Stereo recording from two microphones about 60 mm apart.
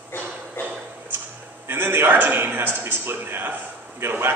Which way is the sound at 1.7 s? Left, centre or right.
Right.